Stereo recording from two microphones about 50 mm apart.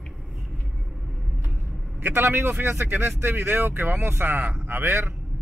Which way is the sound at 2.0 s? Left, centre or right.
Right.